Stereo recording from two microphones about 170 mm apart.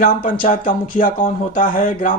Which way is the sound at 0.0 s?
50° left (ahead or behind).